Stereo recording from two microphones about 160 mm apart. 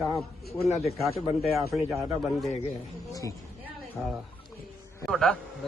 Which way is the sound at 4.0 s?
5° left (ahead or behind).